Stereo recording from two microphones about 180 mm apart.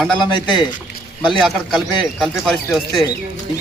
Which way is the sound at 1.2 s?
Centre (ahead or behind).